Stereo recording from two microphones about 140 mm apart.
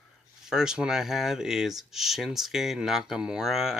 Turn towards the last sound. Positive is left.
turn(degrees=0)  # may be behind; listen again after turning